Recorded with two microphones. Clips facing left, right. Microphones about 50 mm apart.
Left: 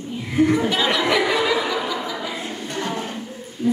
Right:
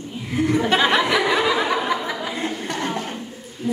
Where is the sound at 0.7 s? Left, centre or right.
Right.